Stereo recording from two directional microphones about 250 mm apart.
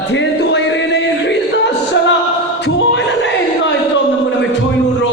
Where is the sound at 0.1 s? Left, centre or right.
Left.